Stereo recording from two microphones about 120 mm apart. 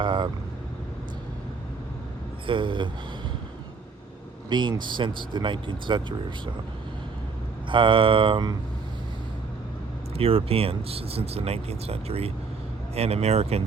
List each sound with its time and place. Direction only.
0.0 s vehicle: 45° right (ahead or behind)
2.5 s speech: 45° right (ahead or behind)
4.4 s speech: 40° right (ahead or behind)
7.7 s speech: 45° right (ahead or behind)
10.2 s speech: 50° right (ahead or behind)